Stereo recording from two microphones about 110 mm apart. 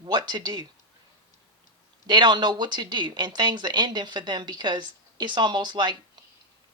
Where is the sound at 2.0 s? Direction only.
45° right (ahead or behind).